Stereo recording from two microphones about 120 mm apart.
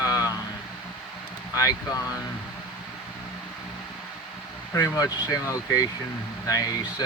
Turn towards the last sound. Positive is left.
turn(degrees=30)  # may be behind; listen again after turning